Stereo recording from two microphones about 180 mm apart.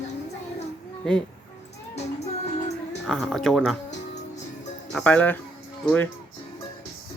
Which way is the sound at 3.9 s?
40° left (ahead or behind).